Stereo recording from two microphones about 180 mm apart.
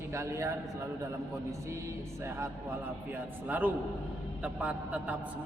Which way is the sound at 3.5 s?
10° right (ahead or behind).